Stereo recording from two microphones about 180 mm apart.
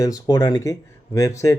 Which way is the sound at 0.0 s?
20° left (ahead or behind).